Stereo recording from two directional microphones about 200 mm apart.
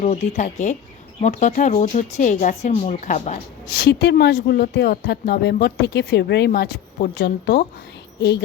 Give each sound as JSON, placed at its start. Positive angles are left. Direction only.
{"t": 0.0, "sound": "speech", "side_deg": 35}
{"t": 3.8, "sound": "a woman's voice", "side_deg": 55}